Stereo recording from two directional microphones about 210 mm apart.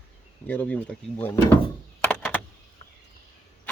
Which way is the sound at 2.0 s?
10° left (ahead or behind).